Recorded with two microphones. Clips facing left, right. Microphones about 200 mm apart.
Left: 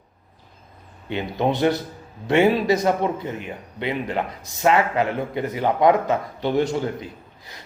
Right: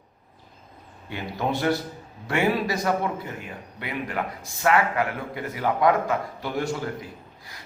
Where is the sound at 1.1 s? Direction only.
20° left (ahead or behind).